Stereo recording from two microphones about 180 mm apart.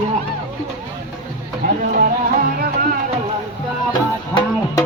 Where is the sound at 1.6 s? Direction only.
55° right (ahead or behind).